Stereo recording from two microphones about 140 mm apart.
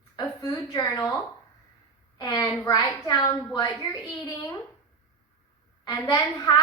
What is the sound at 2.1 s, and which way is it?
A woman's voice, 30° left (ahead or behind).